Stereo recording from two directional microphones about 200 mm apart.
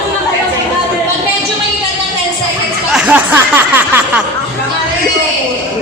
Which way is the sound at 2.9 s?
5° right (ahead or behind).